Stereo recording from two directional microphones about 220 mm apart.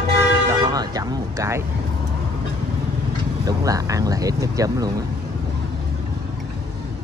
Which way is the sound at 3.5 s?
15° right (ahead or behind).